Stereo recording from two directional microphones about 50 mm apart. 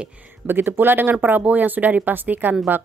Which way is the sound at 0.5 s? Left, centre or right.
Right.